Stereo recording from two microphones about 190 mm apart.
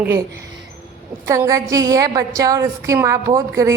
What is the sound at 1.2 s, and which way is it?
A woman's voice, 15° right (ahead or behind).